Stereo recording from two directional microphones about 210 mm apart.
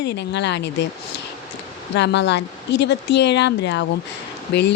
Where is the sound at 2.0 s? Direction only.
55° left (ahead or behind).